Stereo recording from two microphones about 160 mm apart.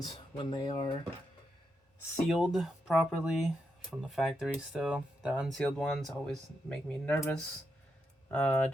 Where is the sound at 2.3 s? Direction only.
Centre (ahead or behind).